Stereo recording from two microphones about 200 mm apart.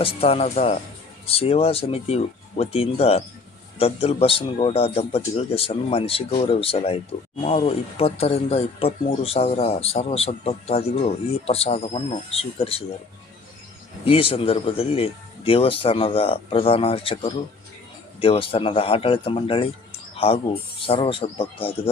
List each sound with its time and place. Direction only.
0.0 s speech: 30° left (ahead or behind)
14.0 s speech: 25° left (ahead or behind)